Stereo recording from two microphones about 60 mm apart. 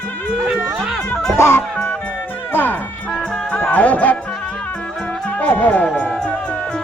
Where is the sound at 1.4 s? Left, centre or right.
Left.